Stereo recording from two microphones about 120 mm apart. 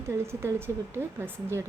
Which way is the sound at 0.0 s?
20° right (ahead or behind).